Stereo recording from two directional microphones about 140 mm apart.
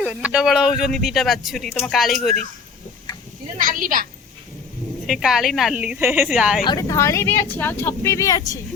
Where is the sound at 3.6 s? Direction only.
80° right.